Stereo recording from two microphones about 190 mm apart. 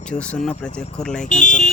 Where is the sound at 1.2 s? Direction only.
40° left (ahead or behind).